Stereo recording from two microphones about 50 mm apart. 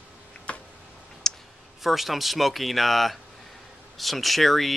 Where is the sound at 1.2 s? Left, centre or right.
Centre.